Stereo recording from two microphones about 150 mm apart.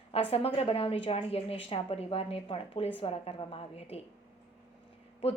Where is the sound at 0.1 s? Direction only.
40° left (ahead or behind).